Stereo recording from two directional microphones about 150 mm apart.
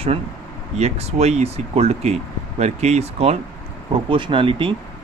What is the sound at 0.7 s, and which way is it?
Speech, 45° right (ahead or behind).